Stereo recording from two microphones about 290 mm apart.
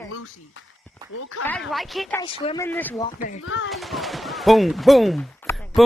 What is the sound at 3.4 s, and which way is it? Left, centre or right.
Speech, left.